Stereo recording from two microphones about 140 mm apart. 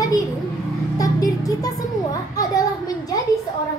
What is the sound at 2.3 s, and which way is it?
Speech, 25° left (ahead or behind).